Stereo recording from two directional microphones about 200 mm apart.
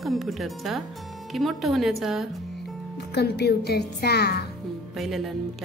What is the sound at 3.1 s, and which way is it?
Speech, 55° left (ahead or behind).